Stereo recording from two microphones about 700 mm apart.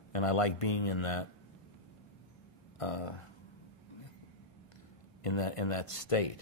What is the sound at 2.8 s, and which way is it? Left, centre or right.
Speech, left.